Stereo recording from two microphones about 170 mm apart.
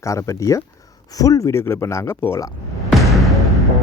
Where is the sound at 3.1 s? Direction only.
Centre (ahead or behind).